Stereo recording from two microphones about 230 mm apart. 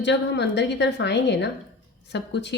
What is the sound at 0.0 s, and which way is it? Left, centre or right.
Speech, left.